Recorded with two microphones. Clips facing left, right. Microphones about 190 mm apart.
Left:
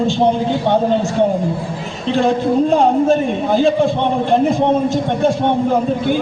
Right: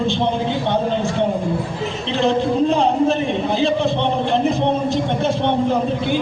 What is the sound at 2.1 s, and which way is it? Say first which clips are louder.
A man's voice: left 3 dB; 45° left (ahead or behind).